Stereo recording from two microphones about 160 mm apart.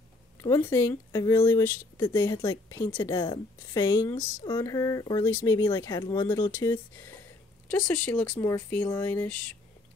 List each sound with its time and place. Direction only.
0.4 s a woman's voice: 15° left (ahead or behind)
8.0 s speech: 10° left (ahead or behind)